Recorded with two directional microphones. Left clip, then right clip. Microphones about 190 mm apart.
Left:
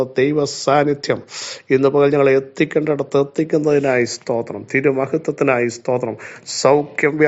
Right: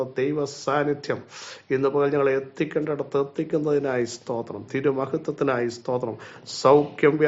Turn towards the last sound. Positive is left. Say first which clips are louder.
# left 2 dB
turn(degrees=35)  # may be behind; listen again after turning